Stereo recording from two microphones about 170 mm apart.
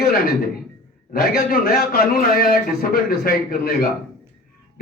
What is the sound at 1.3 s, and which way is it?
A man's voice, 60° left (ahead or behind).